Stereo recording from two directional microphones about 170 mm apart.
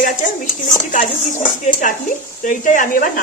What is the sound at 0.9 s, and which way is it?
Speech, 50° left (ahead or behind).